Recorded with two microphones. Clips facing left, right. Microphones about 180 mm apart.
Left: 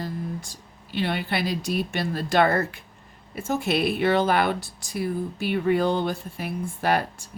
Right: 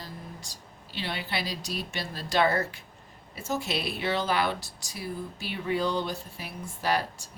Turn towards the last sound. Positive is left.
turn(degrees=55)  # may be behind; listen again after turning